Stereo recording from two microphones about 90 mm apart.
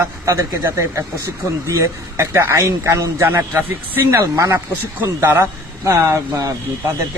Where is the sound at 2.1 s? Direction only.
25° right (ahead or behind).